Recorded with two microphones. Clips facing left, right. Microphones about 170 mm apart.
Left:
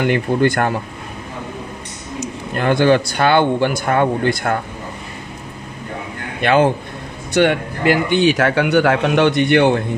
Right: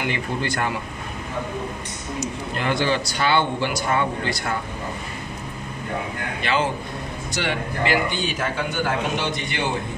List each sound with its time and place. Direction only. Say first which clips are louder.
0.0 s a man's voice: left 10 dB; 55° left (ahead or behind)
2.5 s a man's voice: left 9 dB; 55° left (ahead or behind)
6.4 s a man's voice: left 10 dB; 60° left (ahead or behind)